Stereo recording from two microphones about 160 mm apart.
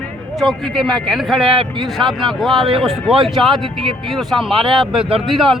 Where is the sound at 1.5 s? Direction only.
30° right (ahead or behind).